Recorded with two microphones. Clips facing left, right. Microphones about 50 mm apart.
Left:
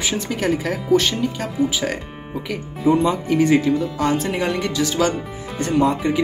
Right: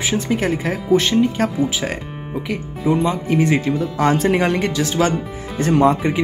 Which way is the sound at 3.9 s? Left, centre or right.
Right.